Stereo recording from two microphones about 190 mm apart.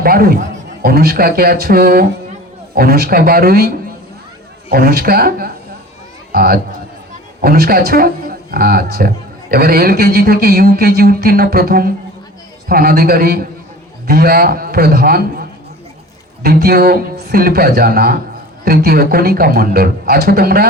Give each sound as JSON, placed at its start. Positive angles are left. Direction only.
{"t": 0.0, "sound": "a man's voice", "side_deg": -50}
{"t": 4.7, "sound": "a man's voice", "side_deg": -50}